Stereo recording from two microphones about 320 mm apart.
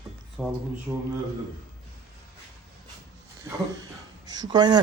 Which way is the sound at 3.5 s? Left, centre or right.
Centre.